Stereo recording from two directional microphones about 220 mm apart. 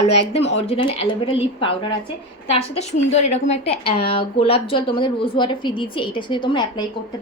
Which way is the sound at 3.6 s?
25° left (ahead or behind).